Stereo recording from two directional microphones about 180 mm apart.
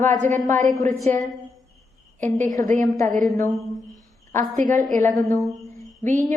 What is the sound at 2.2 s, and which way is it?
Speech, 45° right (ahead or behind).